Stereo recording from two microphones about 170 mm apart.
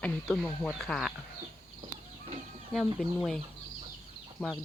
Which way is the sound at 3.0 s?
5° left (ahead or behind).